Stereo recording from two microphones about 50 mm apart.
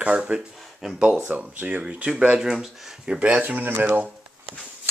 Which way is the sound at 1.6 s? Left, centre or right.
Right.